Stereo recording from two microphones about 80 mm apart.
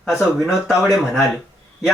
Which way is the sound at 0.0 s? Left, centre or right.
Centre.